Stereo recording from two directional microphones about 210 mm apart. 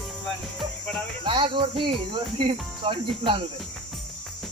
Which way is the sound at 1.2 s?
25° right (ahead or behind).